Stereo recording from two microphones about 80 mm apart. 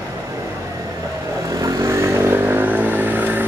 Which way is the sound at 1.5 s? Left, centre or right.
Right.